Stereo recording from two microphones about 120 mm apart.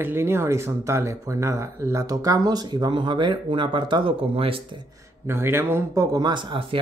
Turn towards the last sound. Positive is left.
turn(degrees=-45)  # may be behind; listen again after turning